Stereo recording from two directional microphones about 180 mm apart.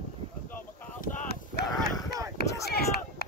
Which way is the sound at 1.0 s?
65° left (ahead or behind).